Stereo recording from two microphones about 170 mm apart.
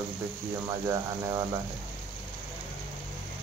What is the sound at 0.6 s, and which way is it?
Speech, 20° right (ahead or behind).